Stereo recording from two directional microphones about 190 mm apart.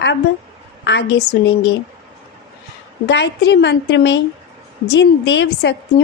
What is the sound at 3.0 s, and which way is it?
A woman's voice, 65° left (ahead or behind).